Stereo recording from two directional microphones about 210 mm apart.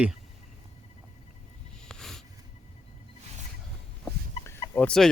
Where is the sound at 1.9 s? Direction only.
Centre (ahead or behind).